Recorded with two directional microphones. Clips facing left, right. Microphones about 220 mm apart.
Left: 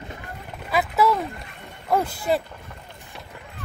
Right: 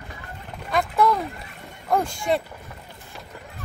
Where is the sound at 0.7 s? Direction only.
5° left (ahead or behind).